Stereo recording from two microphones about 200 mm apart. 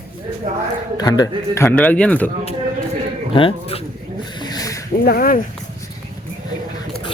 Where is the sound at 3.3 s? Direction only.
30° left (ahead or behind).